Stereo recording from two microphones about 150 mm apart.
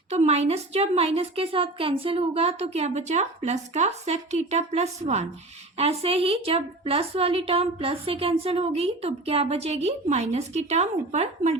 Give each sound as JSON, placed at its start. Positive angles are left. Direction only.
{"t": 0.1, "sound": "a woman's voice", "side_deg": -45}